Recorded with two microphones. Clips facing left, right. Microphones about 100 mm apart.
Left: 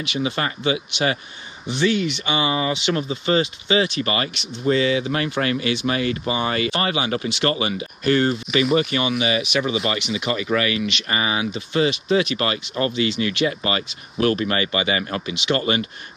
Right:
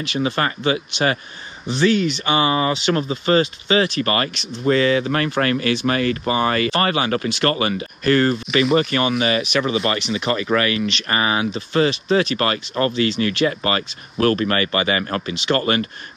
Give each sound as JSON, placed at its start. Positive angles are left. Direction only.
{"t": 0.0, "sound": "speech", "side_deg": -40}